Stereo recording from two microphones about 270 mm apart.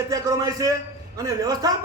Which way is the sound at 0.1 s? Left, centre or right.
Centre.